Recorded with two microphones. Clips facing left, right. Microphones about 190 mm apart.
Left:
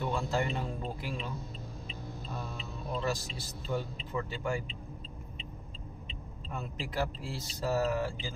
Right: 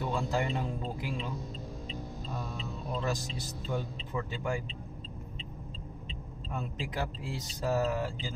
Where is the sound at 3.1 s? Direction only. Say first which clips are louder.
Right 1 dB; 15° right (ahead or behind).